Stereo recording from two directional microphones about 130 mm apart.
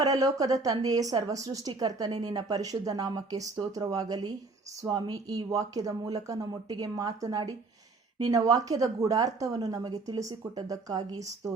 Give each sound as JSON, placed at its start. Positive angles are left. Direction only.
{"t": 0.0, "sound": "a woman's voice", "side_deg": -30}